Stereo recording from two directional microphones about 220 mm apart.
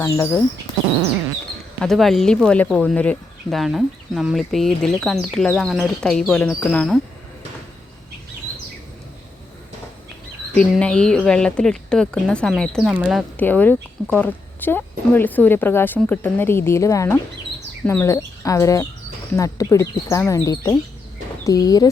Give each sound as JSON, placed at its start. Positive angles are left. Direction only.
{"t": 0.0, "sound": "a woman's voice", "side_deg": 10}
{"t": 1.8, "sound": "speech", "side_deg": 0}
{"t": 10.6, "sound": "a woman's voice", "side_deg": 5}